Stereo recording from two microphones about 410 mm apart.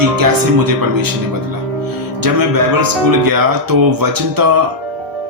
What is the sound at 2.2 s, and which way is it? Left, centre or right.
Speech, right.